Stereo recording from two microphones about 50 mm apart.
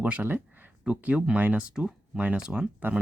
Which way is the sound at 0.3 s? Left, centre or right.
Right.